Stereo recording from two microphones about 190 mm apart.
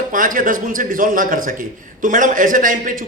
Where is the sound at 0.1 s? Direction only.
45° right (ahead or behind).